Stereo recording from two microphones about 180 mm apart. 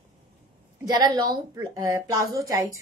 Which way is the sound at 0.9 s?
25° right (ahead or behind).